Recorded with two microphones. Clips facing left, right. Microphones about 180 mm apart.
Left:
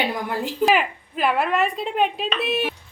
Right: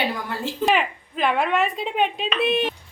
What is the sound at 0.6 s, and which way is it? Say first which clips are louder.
Speech: left 2 dB; centre (ahead or behind).